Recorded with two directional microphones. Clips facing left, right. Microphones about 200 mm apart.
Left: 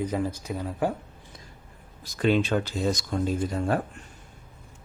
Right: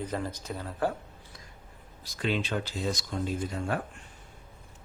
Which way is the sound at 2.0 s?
50° left (ahead or behind).